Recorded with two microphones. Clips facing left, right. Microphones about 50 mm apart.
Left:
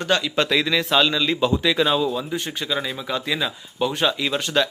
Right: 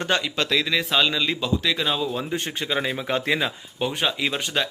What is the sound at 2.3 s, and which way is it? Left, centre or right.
Speech, right.